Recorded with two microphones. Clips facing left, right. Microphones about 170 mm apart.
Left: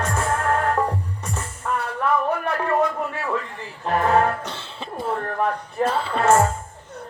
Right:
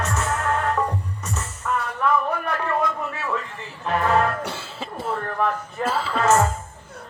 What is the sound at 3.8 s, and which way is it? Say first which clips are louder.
Music: left 2 dB; 35° left (ahead or behind).